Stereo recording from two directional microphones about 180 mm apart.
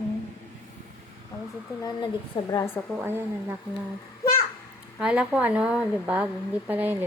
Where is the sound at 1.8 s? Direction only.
20° left (ahead or behind).